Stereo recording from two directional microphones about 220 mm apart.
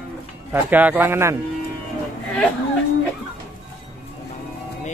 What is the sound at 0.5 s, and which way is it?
Speech, 10° right (ahead or behind).